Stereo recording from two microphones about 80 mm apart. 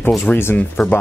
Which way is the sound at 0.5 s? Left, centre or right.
Centre.